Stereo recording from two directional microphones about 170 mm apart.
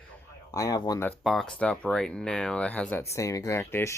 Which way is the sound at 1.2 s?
Centre (ahead or behind).